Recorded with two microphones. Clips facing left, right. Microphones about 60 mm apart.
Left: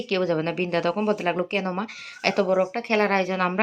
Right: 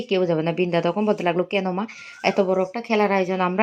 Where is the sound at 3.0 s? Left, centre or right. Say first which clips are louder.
Right 3 dB; centre.